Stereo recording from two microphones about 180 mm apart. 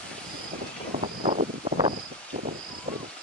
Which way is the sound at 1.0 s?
30° right (ahead or behind).